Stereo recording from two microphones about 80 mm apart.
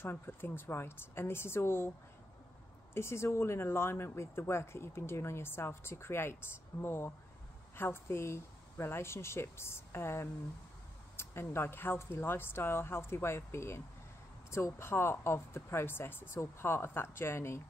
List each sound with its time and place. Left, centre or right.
0.0 s speech: left
2.9 s speech: left